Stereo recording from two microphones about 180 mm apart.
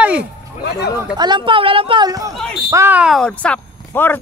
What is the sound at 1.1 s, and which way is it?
A woman's voice, 25° right (ahead or behind).